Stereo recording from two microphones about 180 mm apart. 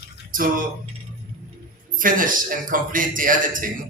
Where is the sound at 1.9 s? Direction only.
50° right (ahead or behind).